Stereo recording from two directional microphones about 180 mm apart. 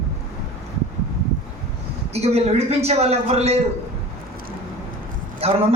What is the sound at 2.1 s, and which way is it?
A man's voice, 35° right (ahead or behind).